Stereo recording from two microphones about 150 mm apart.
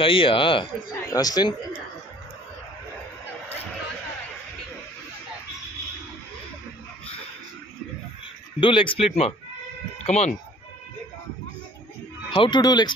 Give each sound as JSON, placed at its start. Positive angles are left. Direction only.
{"t": 0.0, "sound": "speech", "side_deg": 35}
{"t": 8.5, "sound": "speech", "side_deg": 35}
{"t": 12.3, "sound": "speech", "side_deg": 30}